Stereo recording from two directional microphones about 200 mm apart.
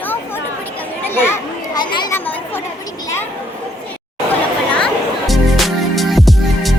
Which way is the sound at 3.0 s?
10° left (ahead or behind).